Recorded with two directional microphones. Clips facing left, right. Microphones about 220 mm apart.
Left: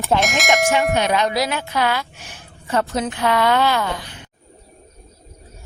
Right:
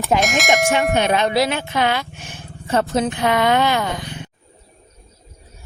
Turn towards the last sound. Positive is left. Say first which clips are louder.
# right 1 dB
turn(degrees=-20)  # may be behind; listen again after turning